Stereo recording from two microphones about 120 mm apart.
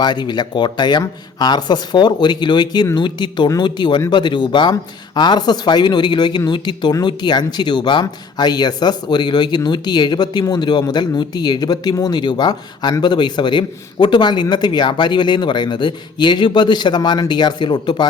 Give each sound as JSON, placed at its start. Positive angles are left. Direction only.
{"t": 0.0, "sound": "speech", "side_deg": 40}